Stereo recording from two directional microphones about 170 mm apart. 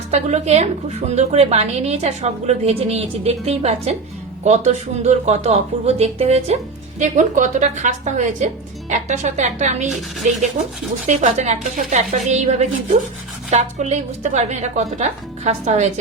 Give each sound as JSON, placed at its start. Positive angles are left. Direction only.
{"t": 0.1, "sound": "a woman's voice", "side_deg": -40}
{"t": 11.0, "sound": "a woman's voice", "side_deg": -45}